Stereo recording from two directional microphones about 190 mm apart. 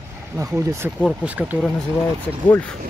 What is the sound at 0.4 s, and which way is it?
Speech, 15° right (ahead or behind).